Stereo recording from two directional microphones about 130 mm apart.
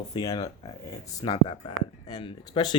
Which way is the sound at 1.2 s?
45° left (ahead or behind).